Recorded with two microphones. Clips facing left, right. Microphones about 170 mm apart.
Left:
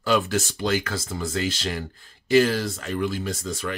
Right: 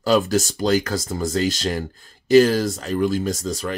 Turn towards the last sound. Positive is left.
turn(degrees=-40)  # may be behind; listen again after turning